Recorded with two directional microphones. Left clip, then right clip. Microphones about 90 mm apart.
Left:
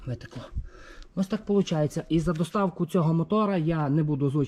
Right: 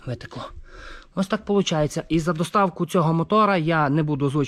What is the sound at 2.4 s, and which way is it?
A man's voice, 25° left (ahead or behind).